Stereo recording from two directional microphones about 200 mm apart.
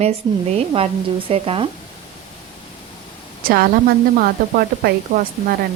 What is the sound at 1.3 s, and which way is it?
Speech, 25° right (ahead or behind).